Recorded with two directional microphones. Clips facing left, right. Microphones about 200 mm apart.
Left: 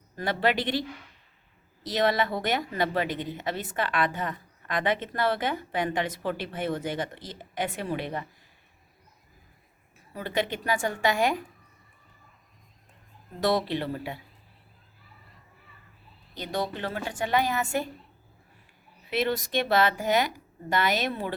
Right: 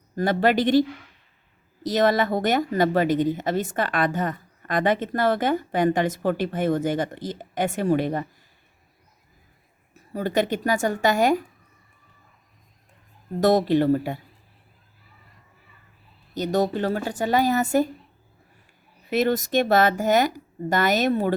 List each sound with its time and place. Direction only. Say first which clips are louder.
0.2 s a woman's voice: right 6 dB; 45° right (ahead or behind)
9.9 s a woman's voice: right 6 dB; 45° right (ahead or behind)
13.4 s a woman's voice: right 8 dB; 45° right (ahead or behind)
16.3 s a woman's voice: right 8 dB; 45° right (ahead or behind)
19.1 s a woman's voice: right 6 dB; 45° right (ahead or behind)